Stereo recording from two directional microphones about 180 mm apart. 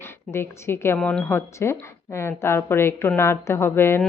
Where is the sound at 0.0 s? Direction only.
15° left (ahead or behind).